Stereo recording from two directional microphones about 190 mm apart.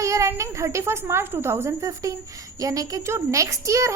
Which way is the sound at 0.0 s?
15° right (ahead or behind).